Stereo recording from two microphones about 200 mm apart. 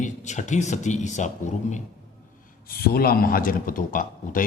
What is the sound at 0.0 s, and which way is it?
Speech, 35° left (ahead or behind).